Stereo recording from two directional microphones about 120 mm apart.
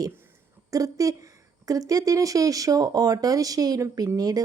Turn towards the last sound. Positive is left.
turn(degrees=-30)  # may be behind; listen again after turning